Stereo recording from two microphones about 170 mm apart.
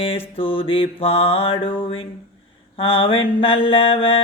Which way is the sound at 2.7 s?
30° left (ahead or behind).